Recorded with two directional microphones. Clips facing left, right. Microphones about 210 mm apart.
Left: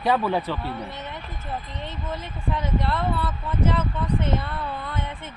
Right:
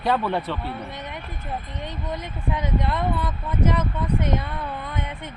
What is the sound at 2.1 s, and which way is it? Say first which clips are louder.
Speech: right 1 dB; 15° right (ahead or behind).